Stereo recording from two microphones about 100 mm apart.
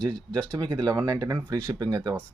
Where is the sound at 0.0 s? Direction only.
10° left (ahead or behind).